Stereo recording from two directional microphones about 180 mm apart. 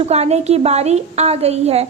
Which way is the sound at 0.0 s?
35° right (ahead or behind).